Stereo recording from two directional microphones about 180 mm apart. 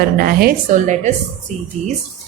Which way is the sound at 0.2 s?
55° right (ahead or behind).